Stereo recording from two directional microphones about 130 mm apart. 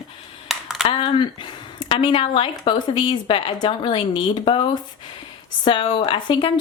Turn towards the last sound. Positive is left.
turn(degrees=40)  # may be behind; listen again after turning